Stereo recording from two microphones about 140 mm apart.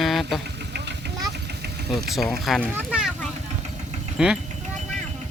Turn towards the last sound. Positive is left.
turn(degrees=-5)  # may be behind; listen again after turning